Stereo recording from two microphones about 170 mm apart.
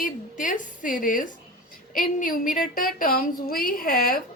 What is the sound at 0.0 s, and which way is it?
A woman's voice, 50° left (ahead or behind).